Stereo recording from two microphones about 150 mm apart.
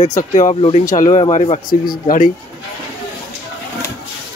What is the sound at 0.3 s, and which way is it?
Speech, 50° left (ahead or behind).